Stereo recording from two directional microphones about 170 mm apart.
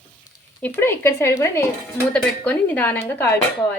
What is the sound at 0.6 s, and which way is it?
Speech, 10° left (ahead or behind).